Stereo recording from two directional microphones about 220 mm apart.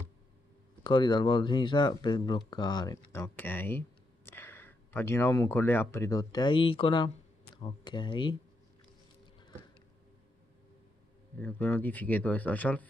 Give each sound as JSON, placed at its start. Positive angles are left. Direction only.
{"t": 0.8, "sound": "speech", "side_deg": 20}
{"t": 11.3, "sound": "speech", "side_deg": 10}